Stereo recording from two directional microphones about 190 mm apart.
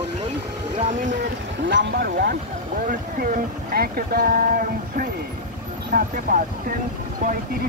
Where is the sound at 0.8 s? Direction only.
40° right (ahead or behind).